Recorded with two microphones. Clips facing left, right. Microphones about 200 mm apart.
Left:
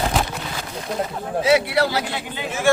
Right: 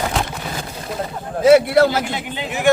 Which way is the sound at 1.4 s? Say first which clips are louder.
Right 7 dB; 50° right (ahead or behind).